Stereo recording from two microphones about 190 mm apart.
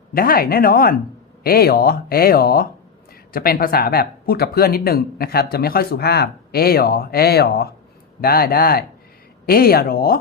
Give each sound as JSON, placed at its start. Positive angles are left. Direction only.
{"t": 0.1, "sound": "speech", "side_deg": 50}